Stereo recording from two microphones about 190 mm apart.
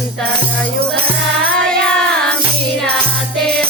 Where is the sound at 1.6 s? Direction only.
5° left (ahead or behind).